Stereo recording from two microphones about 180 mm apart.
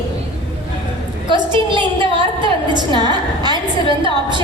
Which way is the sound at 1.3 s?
25° right (ahead or behind).